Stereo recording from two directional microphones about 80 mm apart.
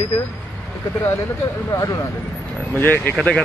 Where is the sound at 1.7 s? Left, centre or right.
Left.